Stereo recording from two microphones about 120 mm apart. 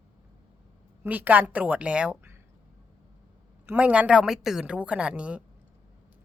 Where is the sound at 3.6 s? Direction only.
10° right (ahead or behind).